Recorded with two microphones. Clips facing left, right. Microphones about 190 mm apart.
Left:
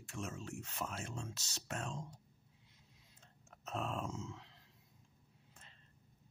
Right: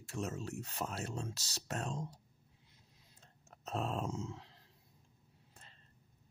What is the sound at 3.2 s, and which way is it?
Dog, 35° right (ahead or behind).